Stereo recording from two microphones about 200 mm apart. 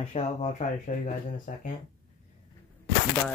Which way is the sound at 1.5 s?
40° left (ahead or behind).